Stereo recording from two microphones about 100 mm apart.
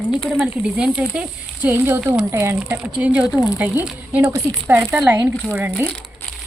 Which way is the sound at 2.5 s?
15° right (ahead or behind).